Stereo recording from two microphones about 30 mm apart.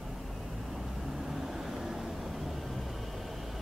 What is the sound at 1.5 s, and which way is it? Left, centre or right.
Vehicle, centre.